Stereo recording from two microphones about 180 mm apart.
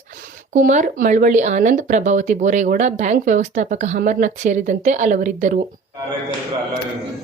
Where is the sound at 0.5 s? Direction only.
45° right (ahead or behind).